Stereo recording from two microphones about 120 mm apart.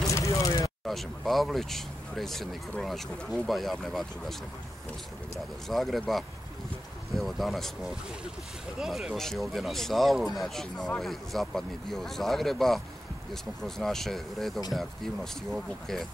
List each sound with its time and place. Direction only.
0.0 s a sound: 25° left (ahead or behind)
0.8 s speech: centre (ahead or behind)
5.7 s speech: centre (ahead or behind)